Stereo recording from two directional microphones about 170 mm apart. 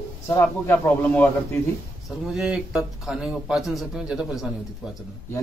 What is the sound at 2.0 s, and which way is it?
Speech, centre (ahead or behind).